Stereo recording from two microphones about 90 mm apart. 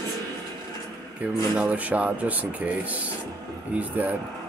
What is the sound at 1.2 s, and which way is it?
Speech, 15° right (ahead or behind).